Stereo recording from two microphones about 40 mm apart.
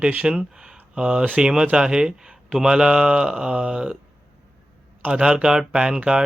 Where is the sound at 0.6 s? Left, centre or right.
Right.